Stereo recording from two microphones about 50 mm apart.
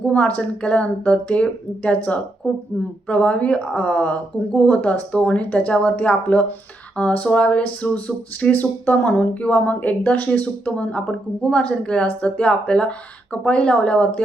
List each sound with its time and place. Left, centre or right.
0.1 s speech: left
8.5 s speech: left